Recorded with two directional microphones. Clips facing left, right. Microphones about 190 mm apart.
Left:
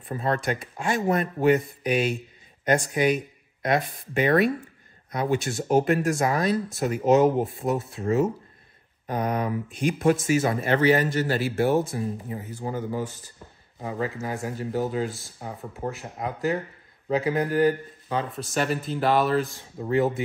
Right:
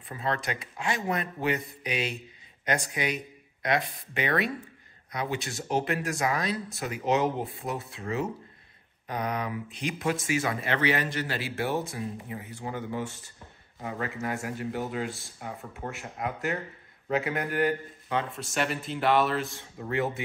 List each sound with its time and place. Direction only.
0.1 s speech: 45° left (ahead or behind)
15.0 s speech: centre (ahead or behind)
16.2 s a man's voice: 35° left (ahead or behind)